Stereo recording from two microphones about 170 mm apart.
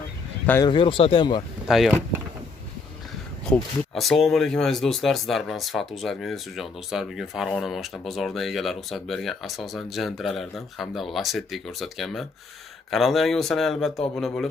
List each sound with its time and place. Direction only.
0.7 s speech: 30° left (ahead or behind)
1.7 s speech: centre (ahead or behind)
3.5 s speech: 10° left (ahead or behind)